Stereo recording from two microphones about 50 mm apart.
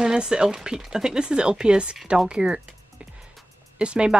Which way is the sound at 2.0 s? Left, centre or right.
Centre.